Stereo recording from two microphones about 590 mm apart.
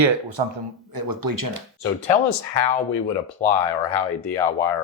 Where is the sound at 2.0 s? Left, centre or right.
Left.